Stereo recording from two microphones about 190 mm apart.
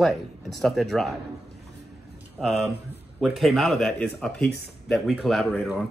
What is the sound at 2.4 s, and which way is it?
Speech, centre (ahead or behind).